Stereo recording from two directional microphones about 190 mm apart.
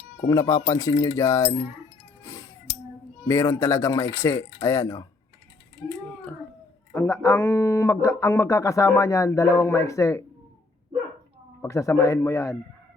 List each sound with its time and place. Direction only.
0.2 s speech: 15° left (ahead or behind)
2.2 s music: 15° left (ahead or behind)
3.2 s speech: 15° left (ahead or behind)
6.9 s speech: 15° left (ahead or behind)
11.6 s speech: 15° left (ahead or behind)